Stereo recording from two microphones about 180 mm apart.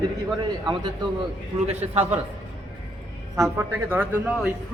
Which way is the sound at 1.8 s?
35° right (ahead or behind).